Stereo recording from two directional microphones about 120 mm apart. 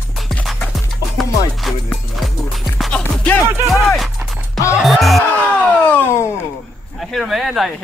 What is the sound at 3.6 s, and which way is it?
Music, centre (ahead or behind).